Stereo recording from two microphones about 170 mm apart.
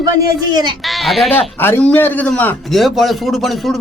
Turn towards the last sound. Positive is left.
turn(degrees=0)  # may be behind; listen again after turning